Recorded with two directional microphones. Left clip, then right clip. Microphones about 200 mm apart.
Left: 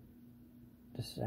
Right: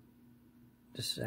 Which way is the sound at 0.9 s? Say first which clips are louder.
Right 7 dB; 15° right (ahead or behind).